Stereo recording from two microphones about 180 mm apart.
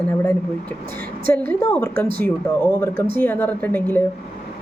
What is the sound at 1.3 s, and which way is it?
Speech, 10° left (ahead or behind).